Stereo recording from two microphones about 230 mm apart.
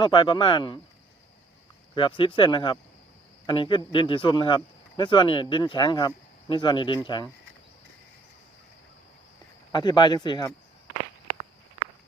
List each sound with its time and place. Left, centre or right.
0.0 s speech: left
2.0 s speech: left
9.7 s speech: centre